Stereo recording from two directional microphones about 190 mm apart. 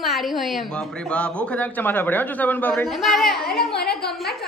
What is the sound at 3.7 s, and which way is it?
Speech, 55° left (ahead or behind).